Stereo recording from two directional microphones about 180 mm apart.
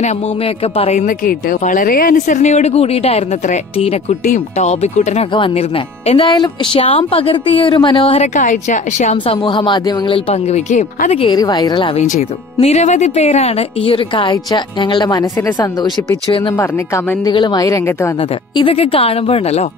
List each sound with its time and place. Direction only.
0.7 s a woman's voice: 40° left (ahead or behind)
6.2 s a woman's voice: 25° left (ahead or behind)
12.0 s speech: 40° left (ahead or behind); by 16.5 s 25° left (ahead or behind)
16.5 s a woman's voice: 15° left (ahead or behind)
18.6 s a woman's voice: 30° left (ahead or behind)